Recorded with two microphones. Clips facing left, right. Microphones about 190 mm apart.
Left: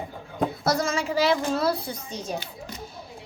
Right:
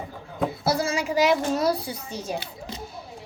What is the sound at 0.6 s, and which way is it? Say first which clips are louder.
A woman's voice: right 1 dB; 10° right (ahead or behind).